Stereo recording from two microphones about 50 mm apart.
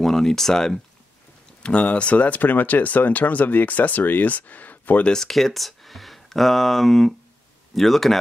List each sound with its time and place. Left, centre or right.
0.0 s speech: centre
1.6 s speech: left
5.0 s speech: centre